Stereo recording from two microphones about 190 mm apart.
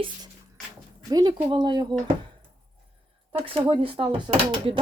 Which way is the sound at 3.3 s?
30° right (ahead or behind).